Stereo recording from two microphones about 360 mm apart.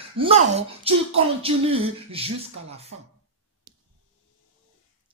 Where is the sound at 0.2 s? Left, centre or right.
Centre.